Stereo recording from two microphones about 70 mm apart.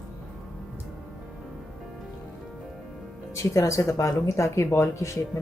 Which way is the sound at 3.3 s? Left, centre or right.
Left.